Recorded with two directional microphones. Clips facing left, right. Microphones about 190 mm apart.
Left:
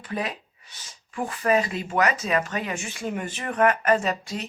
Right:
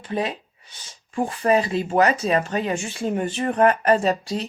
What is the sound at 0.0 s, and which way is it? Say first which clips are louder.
Speech: right 4 dB; 25° right (ahead or behind).